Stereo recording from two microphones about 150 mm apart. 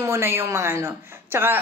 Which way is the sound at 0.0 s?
15° right (ahead or behind).